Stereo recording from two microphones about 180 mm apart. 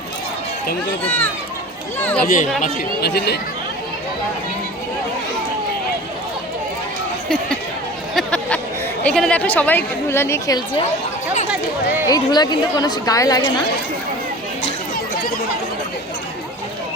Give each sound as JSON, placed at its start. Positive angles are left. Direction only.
{"t": 1.0, "sound": "a woman's voice", "side_deg": 10}
{"t": 2.2, "sound": "speech", "side_deg": 50}
{"t": 3.0, "sound": "speech", "side_deg": 65}
{"t": 8.1, "sound": "a sound", "side_deg": 5}
{"t": 9.0, "sound": "a woman's voice", "side_deg": 5}
{"t": 12.0, "sound": "a woman's voice", "side_deg": 20}